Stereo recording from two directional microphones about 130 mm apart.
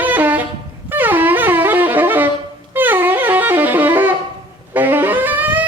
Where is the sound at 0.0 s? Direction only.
15° right (ahead or behind).